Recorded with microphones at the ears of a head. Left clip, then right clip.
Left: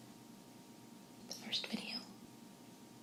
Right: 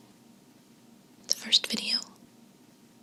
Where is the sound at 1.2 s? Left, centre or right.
Right.